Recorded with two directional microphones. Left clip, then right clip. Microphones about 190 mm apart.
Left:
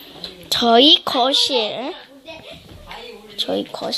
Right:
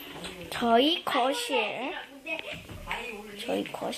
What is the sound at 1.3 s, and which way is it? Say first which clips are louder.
Speech: left 11 dB; 20° left (ahead or behind).